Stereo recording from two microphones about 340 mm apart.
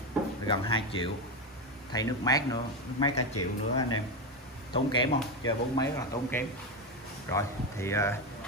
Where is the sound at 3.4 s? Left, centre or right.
Left.